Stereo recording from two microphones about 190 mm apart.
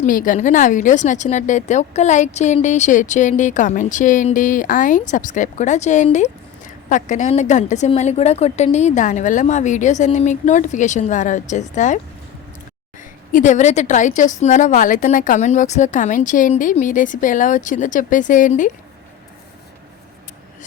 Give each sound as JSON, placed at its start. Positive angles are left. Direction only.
{"t": 0.0, "sound": "speech", "side_deg": 45}
{"t": 13.3, "sound": "speech", "side_deg": 40}